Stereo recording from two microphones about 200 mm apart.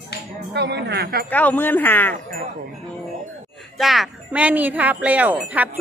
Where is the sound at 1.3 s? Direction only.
10° left (ahead or behind).